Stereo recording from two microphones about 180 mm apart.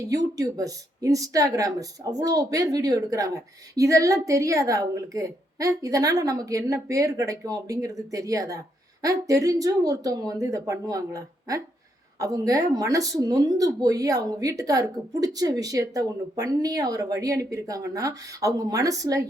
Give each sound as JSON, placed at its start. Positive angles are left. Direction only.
{"t": 0.0, "sound": "a woman's voice", "side_deg": -20}